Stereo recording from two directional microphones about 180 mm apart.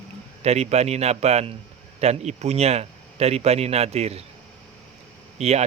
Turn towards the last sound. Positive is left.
turn(degrees=-35)  # may be behind; listen again after turning